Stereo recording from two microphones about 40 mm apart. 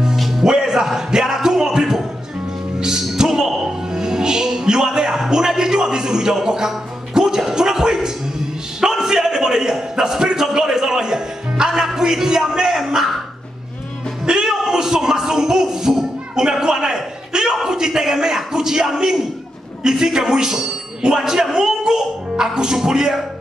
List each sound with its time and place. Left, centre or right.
0.0 s music: centre
5.2 s a sound: centre
11.9 s music: centre
14.2 s music: centre
14.5 s a sound: centre
17.6 s a man's voice: centre